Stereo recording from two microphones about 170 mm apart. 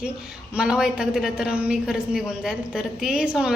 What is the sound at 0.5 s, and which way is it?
A woman's voice, 5° right (ahead or behind).